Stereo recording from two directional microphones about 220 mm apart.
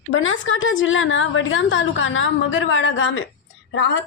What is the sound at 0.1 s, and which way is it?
A woman's voice, 60° left (ahead or behind).